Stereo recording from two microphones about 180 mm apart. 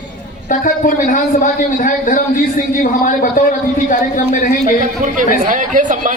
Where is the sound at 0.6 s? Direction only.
45° left (ahead or behind).